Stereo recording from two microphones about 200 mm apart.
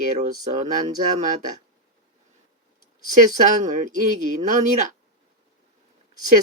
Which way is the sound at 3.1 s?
40° right (ahead or behind).